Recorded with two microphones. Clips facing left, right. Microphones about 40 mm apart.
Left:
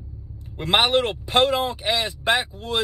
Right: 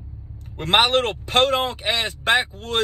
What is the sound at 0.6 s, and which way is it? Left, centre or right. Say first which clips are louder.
Speech: right 1 dB; right.